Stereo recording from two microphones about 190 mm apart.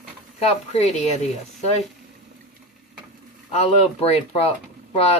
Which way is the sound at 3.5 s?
35° left (ahead or behind).